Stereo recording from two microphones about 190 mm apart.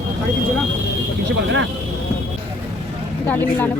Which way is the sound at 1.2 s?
70° right (ahead or behind).